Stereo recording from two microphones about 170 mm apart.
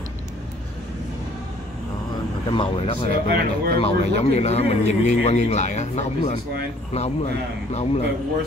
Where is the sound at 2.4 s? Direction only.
30° left (ahead or behind).